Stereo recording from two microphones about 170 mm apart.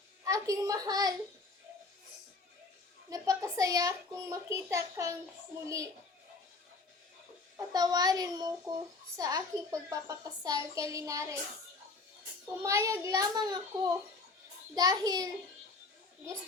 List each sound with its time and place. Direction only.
0.3 s a child's voice: 20° right (ahead or behind)
3.1 s a child's voice: 20° right (ahead or behind)
7.5 s a child's voice: 25° right (ahead or behind)
12.6 s a child's voice: 20° right (ahead or behind)